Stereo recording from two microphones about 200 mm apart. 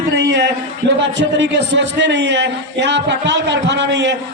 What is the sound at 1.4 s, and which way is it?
A man's voice, 65° right (ahead or behind).